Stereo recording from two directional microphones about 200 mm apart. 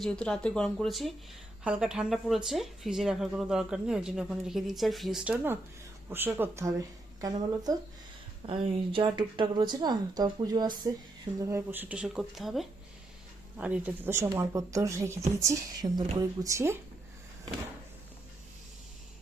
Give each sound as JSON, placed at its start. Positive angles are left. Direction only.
{"t": 0.0, "sound": "a woman's voice", "side_deg": 5}
{"t": 8.4, "sound": "a woman's voice", "side_deg": -25}